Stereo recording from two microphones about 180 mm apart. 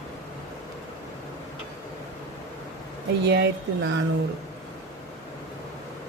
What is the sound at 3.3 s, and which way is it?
Speech, 80° right.